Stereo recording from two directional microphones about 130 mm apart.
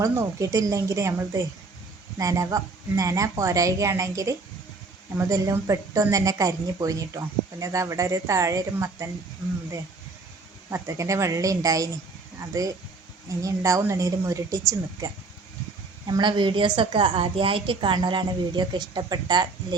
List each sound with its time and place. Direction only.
0.0 s a woman's voice: 25° right (ahead or behind)
10.7 s a woman's voice: 25° right (ahead or behind)
16.0 s a woman's voice: 35° right (ahead or behind)